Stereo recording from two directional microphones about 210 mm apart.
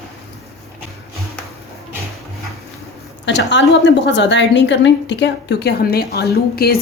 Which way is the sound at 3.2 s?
60° left (ahead or behind).